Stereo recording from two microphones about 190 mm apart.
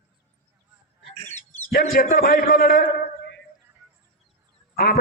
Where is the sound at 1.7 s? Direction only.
55° left (ahead or behind).